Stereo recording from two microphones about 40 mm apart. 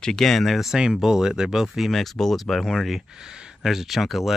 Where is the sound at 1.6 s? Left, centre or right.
Centre.